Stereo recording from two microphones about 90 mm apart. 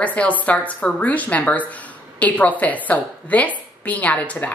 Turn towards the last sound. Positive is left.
turn(degrees=15)  # may be behind; listen again after turning